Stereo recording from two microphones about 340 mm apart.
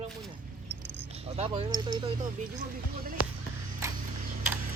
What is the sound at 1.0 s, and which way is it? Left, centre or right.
Speech, centre.